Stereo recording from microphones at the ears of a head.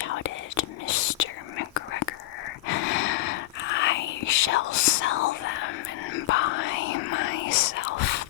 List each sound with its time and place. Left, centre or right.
0.0 s whispering: left